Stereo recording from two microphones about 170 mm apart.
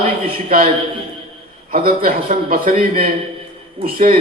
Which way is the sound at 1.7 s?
60° right (ahead or behind).